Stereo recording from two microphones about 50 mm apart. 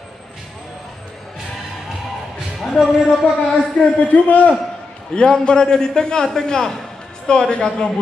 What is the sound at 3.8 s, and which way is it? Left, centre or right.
Speech, left.